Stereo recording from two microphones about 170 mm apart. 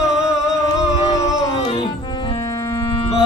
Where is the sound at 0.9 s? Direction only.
40° left (ahead or behind).